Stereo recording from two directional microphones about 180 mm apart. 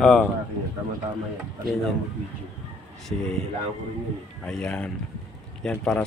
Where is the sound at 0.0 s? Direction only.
Centre (ahead or behind).